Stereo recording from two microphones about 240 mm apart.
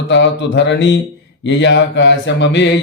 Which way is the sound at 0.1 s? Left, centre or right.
Left.